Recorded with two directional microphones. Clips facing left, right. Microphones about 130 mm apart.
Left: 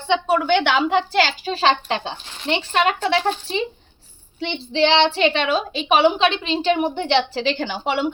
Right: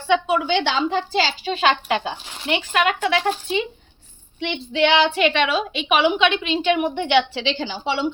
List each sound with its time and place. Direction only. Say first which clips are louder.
0.3 s a woman's voice: left 3 dB; 50° left (ahead or behind)
1.5 s a woman's voice: left 1 dB; 30° left (ahead or behind)
7.4 s a woman's voice: left 2 dB; 55° left (ahead or behind)